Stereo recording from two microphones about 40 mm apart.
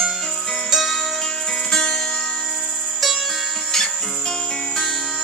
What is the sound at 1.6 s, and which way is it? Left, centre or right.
Music, centre.